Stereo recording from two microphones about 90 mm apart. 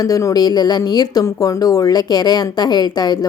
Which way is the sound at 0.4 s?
50° left (ahead or behind).